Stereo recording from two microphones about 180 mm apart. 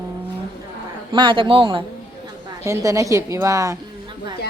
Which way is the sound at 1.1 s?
25° right (ahead or behind).